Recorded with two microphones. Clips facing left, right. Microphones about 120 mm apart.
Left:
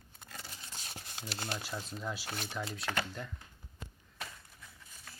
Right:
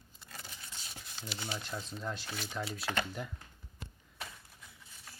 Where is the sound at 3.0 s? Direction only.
10° right (ahead or behind).